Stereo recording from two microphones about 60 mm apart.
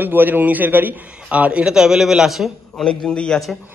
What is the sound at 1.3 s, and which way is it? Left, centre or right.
A man's voice, right.